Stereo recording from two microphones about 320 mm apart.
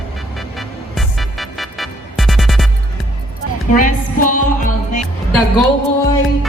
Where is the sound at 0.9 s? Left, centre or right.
Centre.